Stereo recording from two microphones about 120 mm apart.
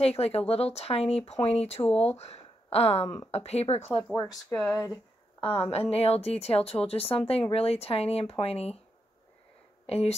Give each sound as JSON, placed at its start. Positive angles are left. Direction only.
{"t": 0.0, "sound": "speech", "side_deg": 55}
{"t": 4.0, "sound": "speech", "side_deg": 10}
{"t": 5.7, "sound": "speech", "side_deg": 55}
{"t": 9.8, "sound": "speech", "side_deg": 55}